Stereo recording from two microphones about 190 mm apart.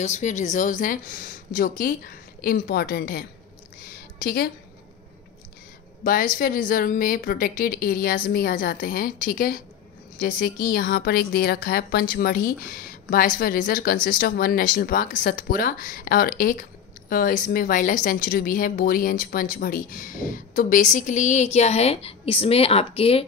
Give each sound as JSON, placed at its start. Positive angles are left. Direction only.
{"t": 0.0, "sound": "a woman's voice", "side_deg": 40}
{"t": 3.9, "sound": "a sound", "side_deg": 55}
{"t": 6.0, "sound": "a woman's voice", "side_deg": 45}